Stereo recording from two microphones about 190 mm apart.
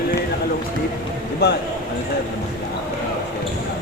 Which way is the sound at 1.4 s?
55° left (ahead or behind).